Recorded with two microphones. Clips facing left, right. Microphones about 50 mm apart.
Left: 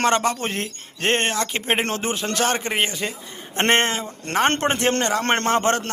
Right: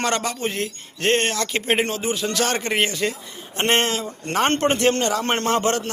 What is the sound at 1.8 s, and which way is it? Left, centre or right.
Speech, left.